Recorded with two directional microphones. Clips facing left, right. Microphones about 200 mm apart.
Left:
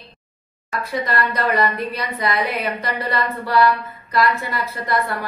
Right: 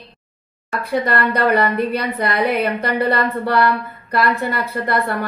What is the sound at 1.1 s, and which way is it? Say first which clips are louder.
A woman's voice: right 4 dB; 60° right (ahead or behind).